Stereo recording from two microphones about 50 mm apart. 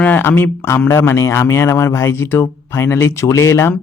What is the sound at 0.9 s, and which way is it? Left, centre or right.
Speech, left.